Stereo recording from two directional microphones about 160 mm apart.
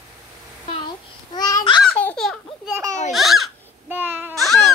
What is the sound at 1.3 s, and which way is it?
Babbling, 25° left (ahead or behind).